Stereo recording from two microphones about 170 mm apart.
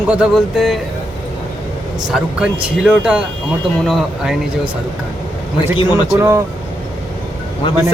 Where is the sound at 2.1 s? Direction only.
5° right (ahead or behind).